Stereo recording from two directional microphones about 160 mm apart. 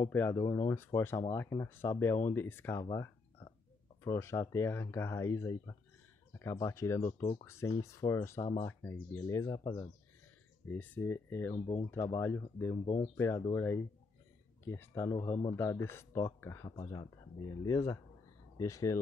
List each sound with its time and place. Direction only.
0.1 s speech: 15° left (ahead or behind)
0.5 s speech: 30° left (ahead or behind)
0.7 s speech: 15° left (ahead or behind)
8.4 s speech: 35° left (ahead or behind)
9.1 s speech: 20° left (ahead or behind)
10.7 s speech: 10° left (ahead or behind)
11.5 s speech: 25° left (ahead or behind)
12.8 s speech: 35° left (ahead or behind)
13.2 s speech: 15° left (ahead or behind)
16.7 s speech: 30° left (ahead or behind)
17.6 s speech: 20° left (ahead or behind)